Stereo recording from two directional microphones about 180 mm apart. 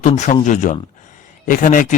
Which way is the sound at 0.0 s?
40° left (ahead or behind).